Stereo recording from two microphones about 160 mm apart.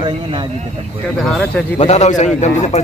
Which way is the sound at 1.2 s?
Centre (ahead or behind).